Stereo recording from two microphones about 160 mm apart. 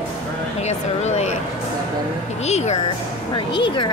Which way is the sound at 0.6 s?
45° left (ahead or behind).